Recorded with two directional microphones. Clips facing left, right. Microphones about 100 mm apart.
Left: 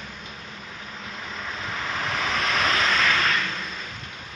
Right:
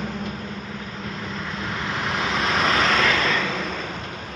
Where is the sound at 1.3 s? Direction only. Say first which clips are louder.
Right 1 dB; 5° right (ahead or behind).